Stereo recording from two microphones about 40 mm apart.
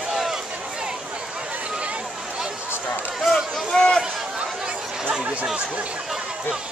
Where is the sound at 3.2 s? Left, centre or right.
Centre.